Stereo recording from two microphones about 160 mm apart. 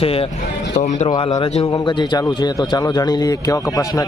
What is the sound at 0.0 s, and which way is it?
Speech, 35° left (ahead or behind).